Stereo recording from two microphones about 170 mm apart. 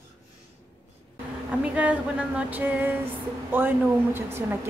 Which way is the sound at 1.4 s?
5° right (ahead or behind).